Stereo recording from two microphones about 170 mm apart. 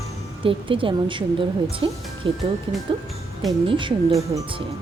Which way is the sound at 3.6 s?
30° right (ahead or behind).